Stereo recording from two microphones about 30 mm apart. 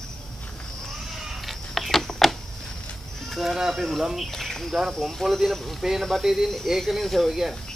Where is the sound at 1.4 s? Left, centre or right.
Centre.